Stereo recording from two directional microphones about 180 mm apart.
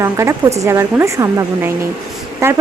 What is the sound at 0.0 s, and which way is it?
A woman's voice, 15° right (ahead or behind).